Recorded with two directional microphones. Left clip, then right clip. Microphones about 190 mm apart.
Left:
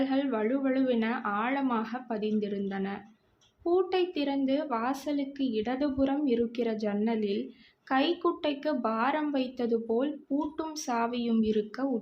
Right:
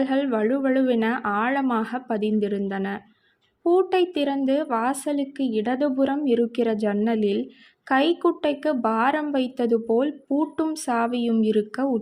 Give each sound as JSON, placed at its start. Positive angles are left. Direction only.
{"t": 0.0, "sound": "a woman's voice", "side_deg": -35}